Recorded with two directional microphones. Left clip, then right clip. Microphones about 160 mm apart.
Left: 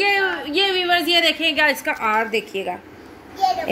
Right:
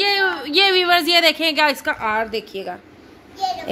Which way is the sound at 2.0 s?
15° right (ahead or behind).